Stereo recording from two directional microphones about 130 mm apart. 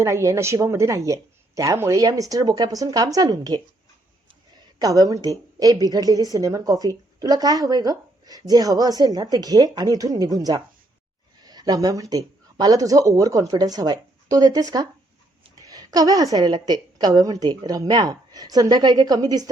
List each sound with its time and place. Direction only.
0.0 s a woman's voice: 20° right (ahead or behind)
4.8 s a woman's voice: 25° right (ahead or behind)